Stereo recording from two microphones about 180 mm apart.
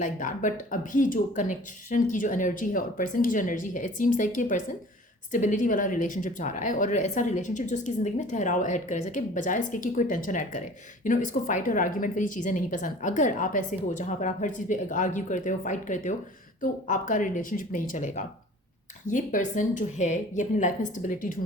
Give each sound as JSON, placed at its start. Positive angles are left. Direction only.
{"t": 0.0, "sound": "a woman's voice", "side_deg": 45}